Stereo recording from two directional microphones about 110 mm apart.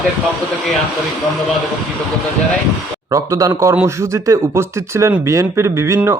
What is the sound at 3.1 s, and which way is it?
A man's voice, 30° right (ahead or behind).